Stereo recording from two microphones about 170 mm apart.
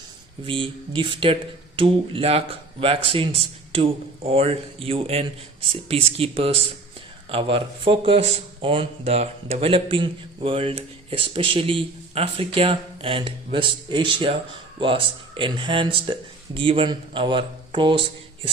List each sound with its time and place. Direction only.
0.4 s a man's voice: 30° right (ahead or behind)